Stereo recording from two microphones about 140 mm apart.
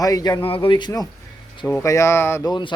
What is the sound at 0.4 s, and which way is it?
Speech, 40° left (ahead or behind).